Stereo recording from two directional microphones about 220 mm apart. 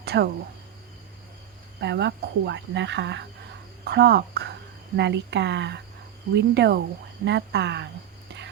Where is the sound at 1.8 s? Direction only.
50° right (ahead or behind).